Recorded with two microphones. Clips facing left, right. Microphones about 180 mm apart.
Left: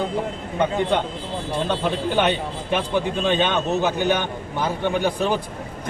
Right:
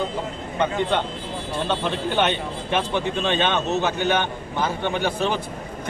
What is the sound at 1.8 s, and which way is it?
A man's voice, 10° left (ahead or behind).